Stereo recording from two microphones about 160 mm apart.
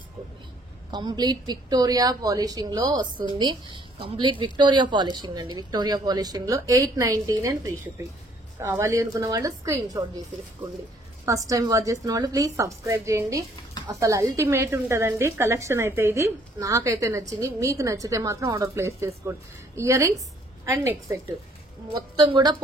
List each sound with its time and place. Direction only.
0.9 s a woman's voice: 25° right (ahead or behind)
11.2 s a woman's voice: 20° right (ahead or behind)